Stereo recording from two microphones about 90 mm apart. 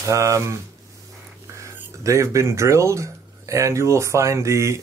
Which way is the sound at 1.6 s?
35° right (ahead or behind).